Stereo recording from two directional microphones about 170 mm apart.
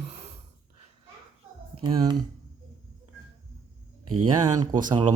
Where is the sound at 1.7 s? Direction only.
25° right (ahead or behind).